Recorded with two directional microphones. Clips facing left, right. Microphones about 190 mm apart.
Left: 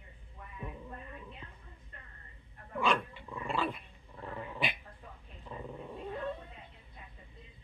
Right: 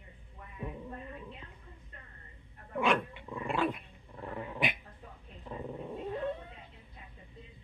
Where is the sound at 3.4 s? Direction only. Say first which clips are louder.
Right 3 dB; 15° right (ahead or behind).